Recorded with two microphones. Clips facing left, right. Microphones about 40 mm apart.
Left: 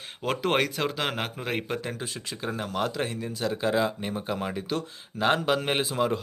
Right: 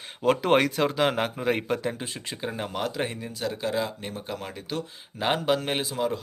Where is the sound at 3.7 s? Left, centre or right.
Centre.